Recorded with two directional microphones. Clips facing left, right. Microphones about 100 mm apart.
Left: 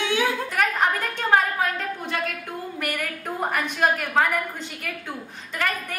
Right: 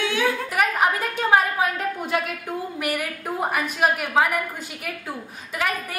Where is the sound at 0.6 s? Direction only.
10° right (ahead or behind).